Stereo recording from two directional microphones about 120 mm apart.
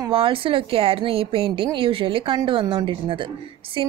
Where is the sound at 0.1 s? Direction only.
50° right (ahead or behind).